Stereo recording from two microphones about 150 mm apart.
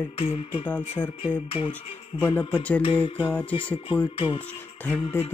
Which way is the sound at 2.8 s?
35° left (ahead or behind).